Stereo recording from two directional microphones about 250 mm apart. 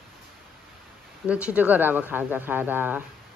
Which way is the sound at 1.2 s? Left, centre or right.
Centre.